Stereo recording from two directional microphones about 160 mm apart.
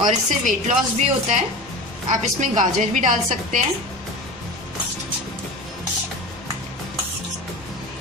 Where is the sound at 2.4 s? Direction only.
50° right (ahead or behind).